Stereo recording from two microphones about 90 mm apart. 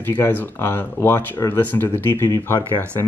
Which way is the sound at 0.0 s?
20° left (ahead or behind).